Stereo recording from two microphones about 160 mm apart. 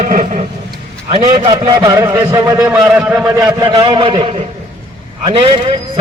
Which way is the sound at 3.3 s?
20° right (ahead or behind).